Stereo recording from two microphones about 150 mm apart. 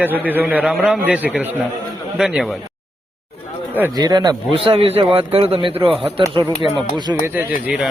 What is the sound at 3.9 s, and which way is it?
A man's voice, 25° right (ahead or behind).